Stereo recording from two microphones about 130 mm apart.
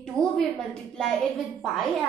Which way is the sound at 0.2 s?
5° left (ahead or behind).